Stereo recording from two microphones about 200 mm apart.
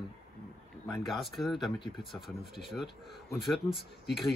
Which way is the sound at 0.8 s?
Centre (ahead or behind).